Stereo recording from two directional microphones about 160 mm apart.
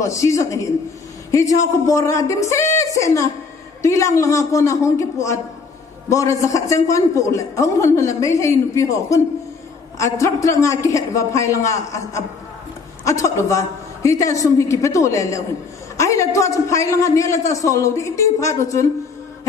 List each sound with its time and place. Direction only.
0.0 s a man's voice: 20° left (ahead or behind)
1.9 s a man's voice: 20° left (ahead or behind)